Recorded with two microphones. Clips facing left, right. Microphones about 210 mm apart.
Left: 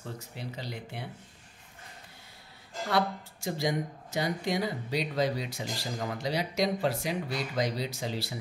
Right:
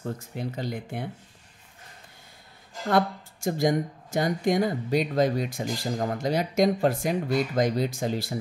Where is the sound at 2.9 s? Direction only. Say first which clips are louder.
Right 5 dB; 50° right (ahead or behind).